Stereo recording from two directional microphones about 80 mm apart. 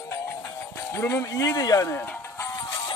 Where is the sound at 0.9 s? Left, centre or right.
Left.